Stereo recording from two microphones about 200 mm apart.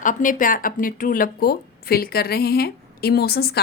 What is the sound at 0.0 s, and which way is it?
Speech, 40° left (ahead or behind).